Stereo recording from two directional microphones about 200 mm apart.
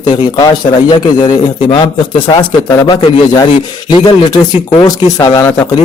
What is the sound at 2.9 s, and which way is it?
Speech, 20° left (ahead or behind).